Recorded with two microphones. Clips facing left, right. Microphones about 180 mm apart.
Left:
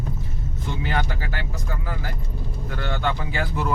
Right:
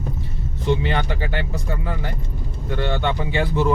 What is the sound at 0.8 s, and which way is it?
Speech, 25° right (ahead or behind).